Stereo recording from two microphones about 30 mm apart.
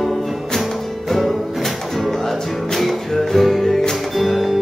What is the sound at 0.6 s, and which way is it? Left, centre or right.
Music, centre.